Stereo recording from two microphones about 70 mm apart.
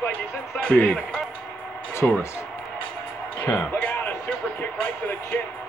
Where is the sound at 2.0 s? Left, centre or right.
Centre.